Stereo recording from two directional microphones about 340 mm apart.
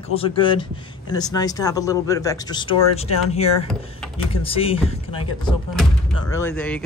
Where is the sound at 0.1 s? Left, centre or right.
Centre.